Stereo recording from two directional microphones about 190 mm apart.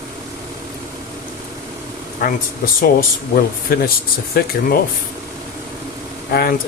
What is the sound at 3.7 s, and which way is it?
Speech, 50° left (ahead or behind).